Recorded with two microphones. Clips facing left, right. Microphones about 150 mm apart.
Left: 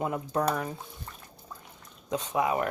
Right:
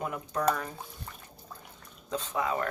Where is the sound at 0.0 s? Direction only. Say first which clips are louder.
Left 1 dB; 25° left (ahead or behind).